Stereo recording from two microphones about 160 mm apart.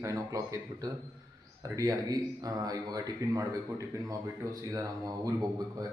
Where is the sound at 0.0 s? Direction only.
20° right (ahead or behind).